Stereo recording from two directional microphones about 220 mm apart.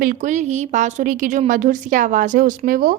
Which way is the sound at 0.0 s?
35° right (ahead or behind).